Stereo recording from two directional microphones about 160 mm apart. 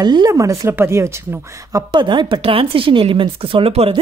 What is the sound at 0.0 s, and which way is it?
Speech, 25° right (ahead or behind).